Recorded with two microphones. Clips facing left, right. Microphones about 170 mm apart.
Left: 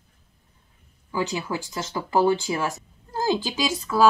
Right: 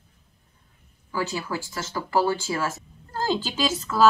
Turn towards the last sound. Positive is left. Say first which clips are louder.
# even
turn(degrees=15)  # may be behind; listen again after turning